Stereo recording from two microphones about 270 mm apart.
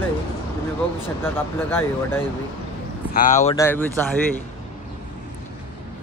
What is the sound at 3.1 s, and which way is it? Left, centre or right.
Speech, left.